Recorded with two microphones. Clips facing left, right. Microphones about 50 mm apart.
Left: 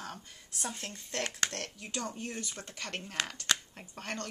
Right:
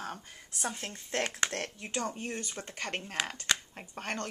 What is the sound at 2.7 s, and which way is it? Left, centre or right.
Speech, right.